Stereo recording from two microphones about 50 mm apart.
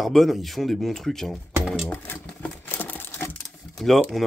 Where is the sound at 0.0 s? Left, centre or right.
Centre.